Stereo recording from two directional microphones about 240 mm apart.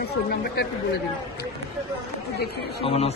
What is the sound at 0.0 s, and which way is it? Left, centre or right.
Speech, left.